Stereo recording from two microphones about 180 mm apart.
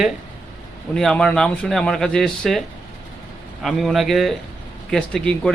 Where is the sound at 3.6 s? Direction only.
Centre (ahead or behind).